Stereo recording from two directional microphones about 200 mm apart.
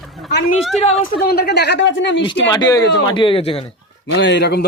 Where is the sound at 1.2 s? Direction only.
50° left (ahead or behind).